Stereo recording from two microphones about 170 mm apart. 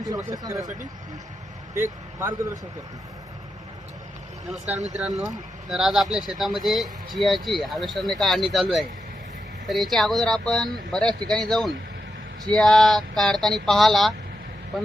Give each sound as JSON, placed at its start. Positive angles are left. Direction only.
{"t": 0.0, "sound": "speech", "side_deg": -20}
{"t": 1.7, "sound": "speech", "side_deg": -15}
{"t": 4.4, "sound": "speech", "side_deg": 0}
{"t": 9.6, "sound": "speech", "side_deg": 0}